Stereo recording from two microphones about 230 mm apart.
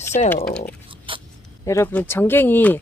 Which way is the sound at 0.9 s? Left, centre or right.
Right.